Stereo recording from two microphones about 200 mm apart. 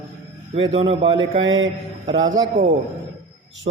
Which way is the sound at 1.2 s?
70° right (ahead or behind).